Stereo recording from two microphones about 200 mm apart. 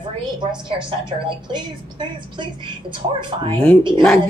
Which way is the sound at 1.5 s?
20° right (ahead or behind).